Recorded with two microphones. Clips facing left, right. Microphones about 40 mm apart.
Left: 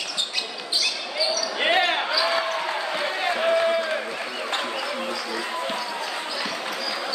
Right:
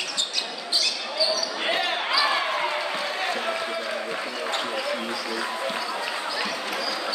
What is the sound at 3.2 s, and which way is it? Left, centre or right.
Basketball bounce, centre.